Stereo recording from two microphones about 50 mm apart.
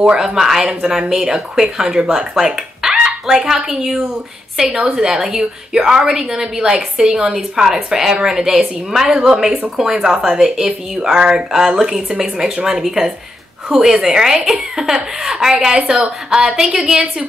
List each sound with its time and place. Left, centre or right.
0.0 s speech: centre
4.7 s a woman's voice: right
5.0 s speech: centre